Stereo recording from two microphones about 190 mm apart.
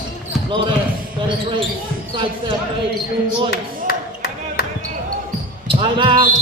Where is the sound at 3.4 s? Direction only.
60° left (ahead or behind).